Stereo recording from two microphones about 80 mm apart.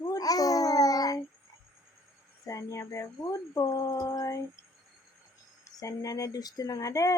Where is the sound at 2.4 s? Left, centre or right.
Left.